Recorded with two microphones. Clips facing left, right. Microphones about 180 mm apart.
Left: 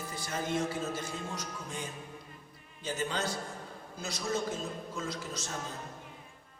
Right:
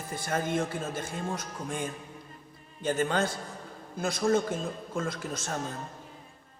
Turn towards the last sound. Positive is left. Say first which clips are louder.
# right 4 dB
turn(degrees=-55)  # may be behind; listen again after turning